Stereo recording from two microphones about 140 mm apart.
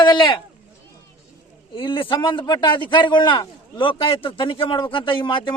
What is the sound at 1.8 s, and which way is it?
Speech, 40° left (ahead or behind).